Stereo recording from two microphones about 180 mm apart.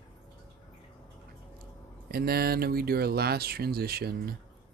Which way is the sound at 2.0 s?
60° right (ahead or behind).